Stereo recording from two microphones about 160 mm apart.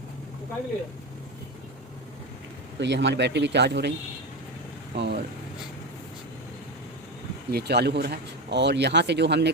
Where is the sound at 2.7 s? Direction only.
90° right.